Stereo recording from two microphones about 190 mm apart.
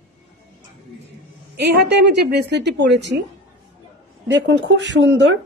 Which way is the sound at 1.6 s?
60° right (ahead or behind).